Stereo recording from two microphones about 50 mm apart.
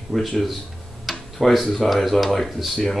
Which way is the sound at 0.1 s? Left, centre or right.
Centre.